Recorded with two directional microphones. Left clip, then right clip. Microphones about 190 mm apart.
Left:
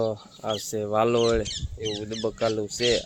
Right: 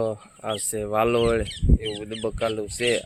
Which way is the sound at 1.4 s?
55° left (ahead or behind).